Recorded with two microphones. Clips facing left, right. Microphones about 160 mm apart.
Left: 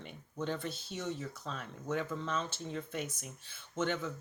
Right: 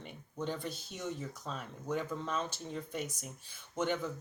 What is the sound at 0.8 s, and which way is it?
Speech, 45° right (ahead or behind).